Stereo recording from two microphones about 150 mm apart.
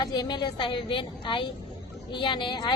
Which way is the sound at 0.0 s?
25° left (ahead or behind).